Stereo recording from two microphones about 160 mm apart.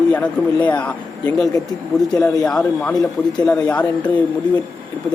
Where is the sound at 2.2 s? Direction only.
25° left (ahead or behind).